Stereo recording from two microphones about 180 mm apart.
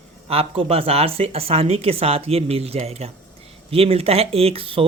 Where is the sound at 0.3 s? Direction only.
35° right (ahead or behind).